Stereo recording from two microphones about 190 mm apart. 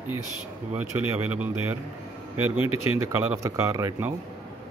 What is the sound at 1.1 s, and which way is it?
Speech, 10° right (ahead or behind).